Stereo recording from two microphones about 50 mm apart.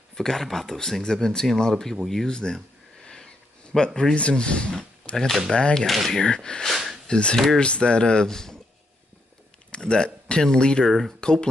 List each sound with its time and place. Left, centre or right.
0.1 s speech: centre
5.9 s speech: centre
6.7 s a sound: centre
7.1 s speech: left
7.3 s speech: centre
7.6 s speech: left
9.7 s a sound: centre
10.4 s speech: centre
10.9 s speech: centre